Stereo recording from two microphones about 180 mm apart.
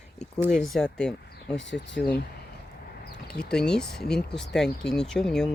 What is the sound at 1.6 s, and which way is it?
Speech, 90° left.